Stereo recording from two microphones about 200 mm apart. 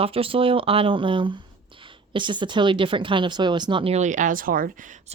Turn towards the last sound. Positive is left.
turn(degrees=-40)  # may be behind; listen again after turning